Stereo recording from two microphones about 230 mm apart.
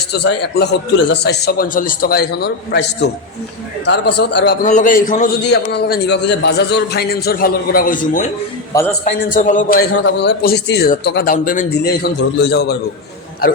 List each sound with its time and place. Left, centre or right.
0.1 s a man's voice: left
4.6 s a man's voice: left
5.4 s a man's voice: left
8.7 s a man's voice: centre
9.3 s a man's voice: left
9.9 s a man's voice: left